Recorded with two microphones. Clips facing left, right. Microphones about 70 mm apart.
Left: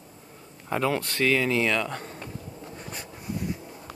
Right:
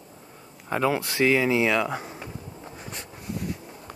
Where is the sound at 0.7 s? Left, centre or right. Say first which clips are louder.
Right 2 dB; centre.